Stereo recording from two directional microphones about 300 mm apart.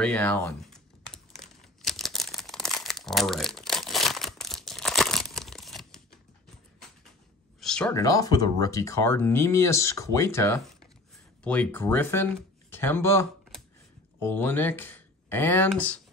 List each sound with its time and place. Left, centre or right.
0.0 s speech: centre
1.4 s crumpling: centre
7.6 s speech: centre